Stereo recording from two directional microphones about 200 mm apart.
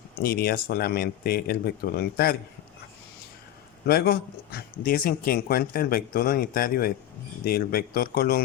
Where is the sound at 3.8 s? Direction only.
50° left (ahead or behind).